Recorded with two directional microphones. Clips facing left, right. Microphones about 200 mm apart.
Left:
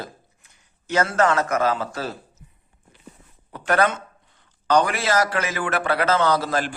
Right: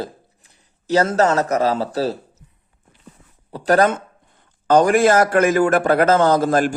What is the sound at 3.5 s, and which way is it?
Speech, 35° right (ahead or behind).